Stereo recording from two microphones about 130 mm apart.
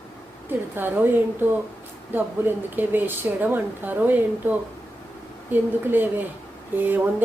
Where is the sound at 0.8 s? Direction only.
15° right (ahead or behind).